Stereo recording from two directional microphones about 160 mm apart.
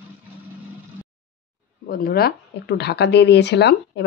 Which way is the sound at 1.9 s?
70° left (ahead or behind).